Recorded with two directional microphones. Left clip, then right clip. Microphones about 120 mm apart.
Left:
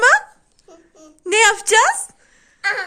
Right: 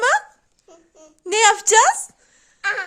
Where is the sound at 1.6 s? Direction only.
40° right (ahead or behind).